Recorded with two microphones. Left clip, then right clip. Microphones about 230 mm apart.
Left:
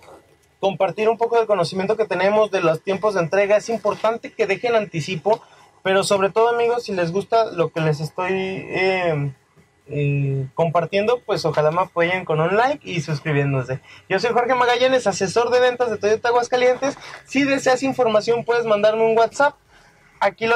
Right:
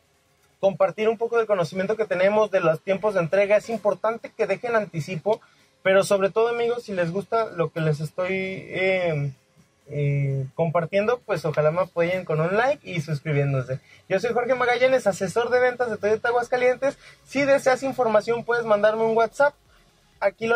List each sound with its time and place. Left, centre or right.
0.6 s speech: centre
5.9 s speech: right